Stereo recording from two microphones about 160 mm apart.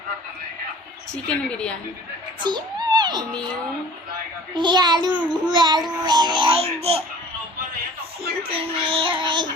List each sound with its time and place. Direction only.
1.1 s a woman's voice: 5° left (ahead or behind)
2.4 s a sound: 25° right (ahead or behind)
4.5 s a child's voice: 25° right (ahead or behind)
8.4 s child singing: 35° right (ahead or behind)